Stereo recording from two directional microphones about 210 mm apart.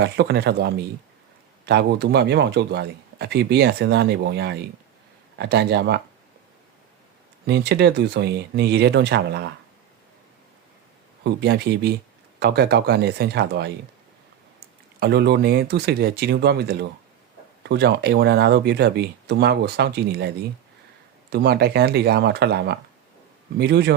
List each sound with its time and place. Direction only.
0.0 s a man's voice: 50° right (ahead or behind)
7.4 s a man's voice: 55° right (ahead or behind)
11.2 s a man's voice: 50° right (ahead or behind)
15.0 s a man's voice: 50° right (ahead or behind)